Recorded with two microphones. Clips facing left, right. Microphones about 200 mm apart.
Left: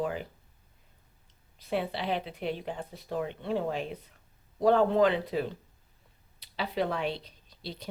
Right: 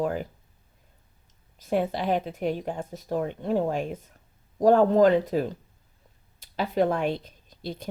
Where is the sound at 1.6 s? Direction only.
45° right (ahead or behind).